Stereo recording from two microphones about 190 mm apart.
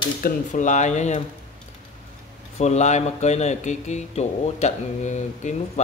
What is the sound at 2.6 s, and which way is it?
Speech, 35° left (ahead or behind).